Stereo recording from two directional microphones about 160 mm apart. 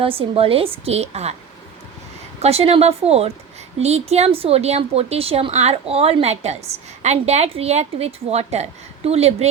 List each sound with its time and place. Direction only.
0.2 s speech: 35° right (ahead or behind)
2.4 s a woman's voice: 40° right (ahead or behind)